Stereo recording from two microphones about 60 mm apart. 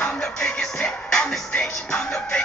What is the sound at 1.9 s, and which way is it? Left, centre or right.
Music, centre.